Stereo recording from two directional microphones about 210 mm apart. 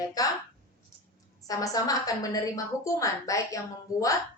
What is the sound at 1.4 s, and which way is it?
A woman's voice, 15° left (ahead or behind).